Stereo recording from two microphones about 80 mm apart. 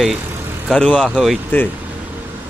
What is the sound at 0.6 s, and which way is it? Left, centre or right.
Speech, centre.